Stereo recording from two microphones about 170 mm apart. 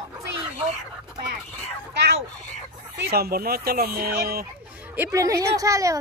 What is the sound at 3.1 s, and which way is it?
Speech, 65° right (ahead or behind).